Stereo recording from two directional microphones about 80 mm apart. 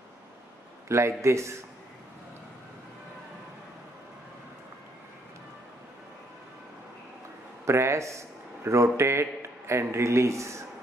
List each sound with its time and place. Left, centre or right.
0.8 s a man's voice: right
7.6 s a man's voice: right